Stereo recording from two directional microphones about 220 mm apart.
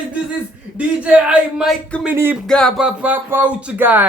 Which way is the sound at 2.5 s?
5° left (ahead or behind).